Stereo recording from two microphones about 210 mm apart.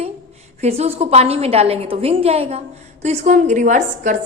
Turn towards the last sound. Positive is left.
turn(degrees=-35)  # may be behind; listen again after turning